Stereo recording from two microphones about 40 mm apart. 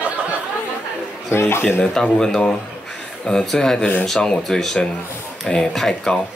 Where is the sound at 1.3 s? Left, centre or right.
Left.